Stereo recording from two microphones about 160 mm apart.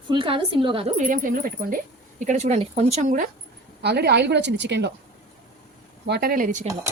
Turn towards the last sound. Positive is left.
turn(degrees=-60)  # may be behind; listen again after turning